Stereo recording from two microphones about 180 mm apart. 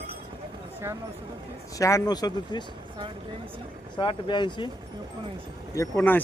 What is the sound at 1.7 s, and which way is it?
Speech, 20° left (ahead or behind).